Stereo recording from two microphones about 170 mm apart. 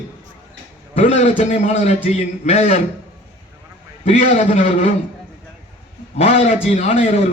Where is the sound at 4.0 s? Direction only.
40° left (ahead or behind).